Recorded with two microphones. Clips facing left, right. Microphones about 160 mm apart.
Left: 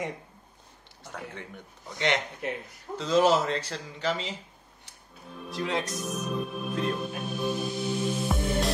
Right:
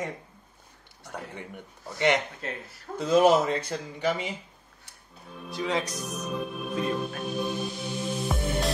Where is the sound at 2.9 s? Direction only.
10° right (ahead or behind).